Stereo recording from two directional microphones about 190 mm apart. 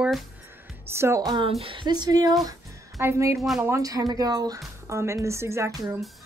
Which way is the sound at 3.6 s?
15° right (ahead or behind).